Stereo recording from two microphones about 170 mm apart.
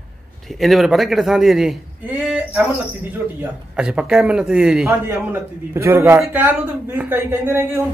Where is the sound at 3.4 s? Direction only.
5° right (ahead or behind).